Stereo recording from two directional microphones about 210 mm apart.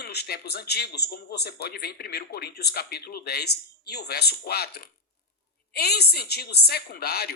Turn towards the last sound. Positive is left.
turn(degrees=50)  # may be behind; listen again after turning